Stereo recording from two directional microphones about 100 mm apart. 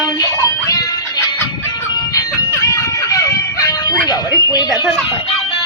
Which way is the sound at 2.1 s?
35° left (ahead or behind).